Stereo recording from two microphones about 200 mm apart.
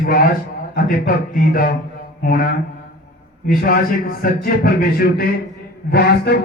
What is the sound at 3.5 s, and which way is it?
A man's voice, 45° left (ahead or behind).